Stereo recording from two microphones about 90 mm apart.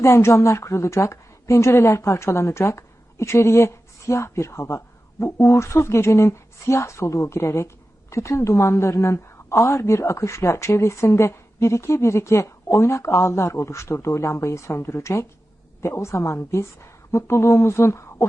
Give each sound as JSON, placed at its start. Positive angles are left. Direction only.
{"t": 0.0, "sound": "a woman's voice", "side_deg": 30}